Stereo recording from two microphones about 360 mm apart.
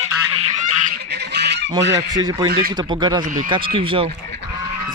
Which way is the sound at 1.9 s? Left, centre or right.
Centre.